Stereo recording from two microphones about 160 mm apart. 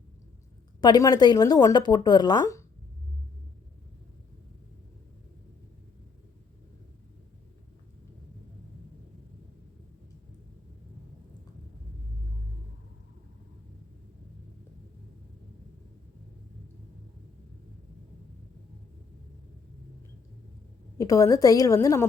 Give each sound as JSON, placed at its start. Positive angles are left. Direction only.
{"t": 0.8, "sound": "speech", "side_deg": 25}
{"t": 21.0, "sound": "speech", "side_deg": 20}